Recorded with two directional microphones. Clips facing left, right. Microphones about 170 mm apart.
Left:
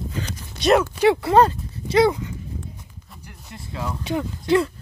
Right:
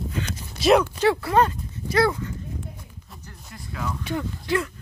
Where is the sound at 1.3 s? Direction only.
35° left (ahead or behind); by 2.3 s 15° left (ahead or behind).